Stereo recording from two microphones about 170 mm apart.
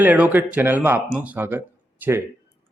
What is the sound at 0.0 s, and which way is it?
Speech, 10° right (ahead or behind).